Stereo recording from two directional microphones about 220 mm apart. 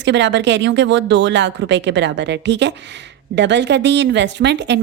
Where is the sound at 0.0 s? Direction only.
55° right (ahead or behind).